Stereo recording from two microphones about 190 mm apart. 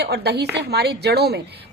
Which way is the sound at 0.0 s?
60° right (ahead or behind).